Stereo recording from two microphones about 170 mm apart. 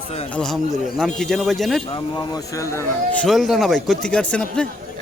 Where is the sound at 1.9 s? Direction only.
20° left (ahead or behind).